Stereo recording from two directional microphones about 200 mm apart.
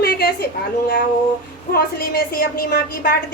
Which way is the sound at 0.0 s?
50° left (ahead or behind).